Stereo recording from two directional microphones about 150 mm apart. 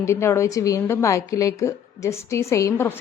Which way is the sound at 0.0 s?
20° left (ahead or behind).